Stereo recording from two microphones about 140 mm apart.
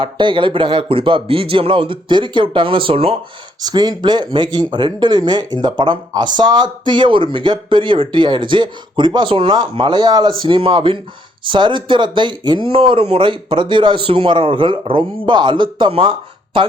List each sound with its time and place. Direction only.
0.0 s speech: 35° right (ahead or behind)
3.6 s speech: 30° right (ahead or behind)